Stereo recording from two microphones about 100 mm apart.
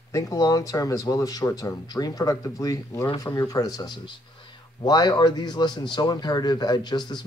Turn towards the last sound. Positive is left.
turn(degrees=45)  # may be behind; listen again after turning